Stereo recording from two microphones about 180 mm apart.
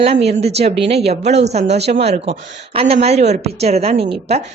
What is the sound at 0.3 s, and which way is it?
A woman's voice, 35° right (ahead or behind).